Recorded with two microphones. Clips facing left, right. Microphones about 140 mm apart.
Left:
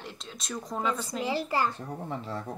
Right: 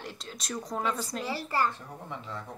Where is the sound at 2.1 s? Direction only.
35° left (ahead or behind).